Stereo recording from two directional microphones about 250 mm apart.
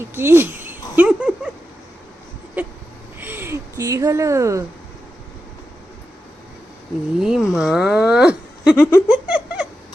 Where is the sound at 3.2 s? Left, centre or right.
Centre.